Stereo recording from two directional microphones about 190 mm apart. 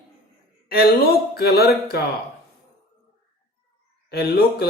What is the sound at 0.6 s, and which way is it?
Speech, 55° left (ahead or behind).